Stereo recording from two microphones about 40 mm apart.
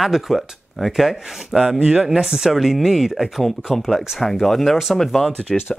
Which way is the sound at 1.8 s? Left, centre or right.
Right.